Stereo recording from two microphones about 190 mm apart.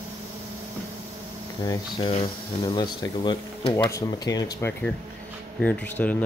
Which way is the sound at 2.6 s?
20° left (ahead or behind).